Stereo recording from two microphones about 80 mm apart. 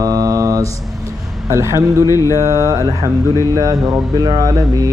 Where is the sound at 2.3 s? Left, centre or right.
Right.